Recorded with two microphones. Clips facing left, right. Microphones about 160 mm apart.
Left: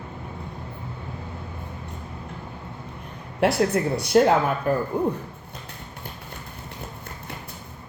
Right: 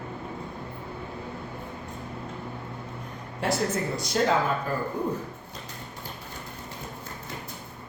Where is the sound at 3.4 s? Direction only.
65° left (ahead or behind).